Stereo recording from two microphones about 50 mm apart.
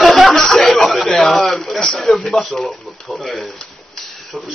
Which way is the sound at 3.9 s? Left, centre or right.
Centre.